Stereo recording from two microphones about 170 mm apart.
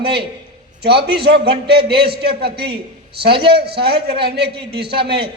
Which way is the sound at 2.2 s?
70° right (ahead or behind).